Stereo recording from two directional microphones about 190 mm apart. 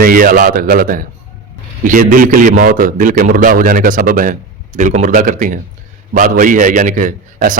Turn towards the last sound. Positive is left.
turn(degrees=-45)  # may be behind; listen again after turning